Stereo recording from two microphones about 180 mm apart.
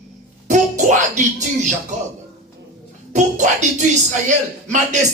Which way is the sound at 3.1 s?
40° right (ahead or behind).